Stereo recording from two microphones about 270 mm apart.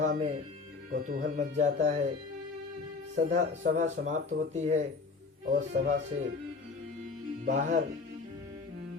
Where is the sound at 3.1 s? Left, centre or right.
Right.